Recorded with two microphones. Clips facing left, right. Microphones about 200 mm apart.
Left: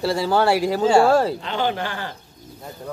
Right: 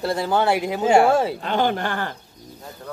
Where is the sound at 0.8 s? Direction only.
20° right (ahead or behind).